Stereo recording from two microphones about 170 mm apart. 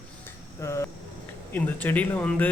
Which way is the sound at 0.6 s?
15° left (ahead or behind).